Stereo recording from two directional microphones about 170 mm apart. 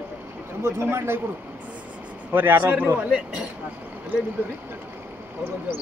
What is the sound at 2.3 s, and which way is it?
Speech, 10° right (ahead or behind).